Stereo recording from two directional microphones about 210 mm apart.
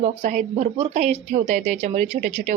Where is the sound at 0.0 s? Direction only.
35° right (ahead or behind).